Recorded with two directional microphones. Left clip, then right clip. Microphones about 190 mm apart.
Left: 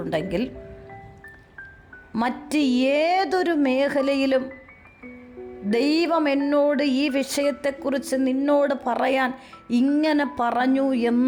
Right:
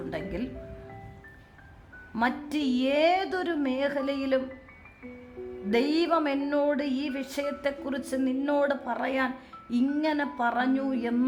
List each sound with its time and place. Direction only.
0.1 s a woman's voice: 40° left (ahead or behind)
2.1 s a woman's voice: 30° left (ahead or behind)
5.7 s a woman's voice: 30° left (ahead or behind)